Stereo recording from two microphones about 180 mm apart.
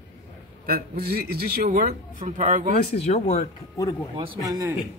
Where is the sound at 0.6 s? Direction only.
60° right (ahead or behind).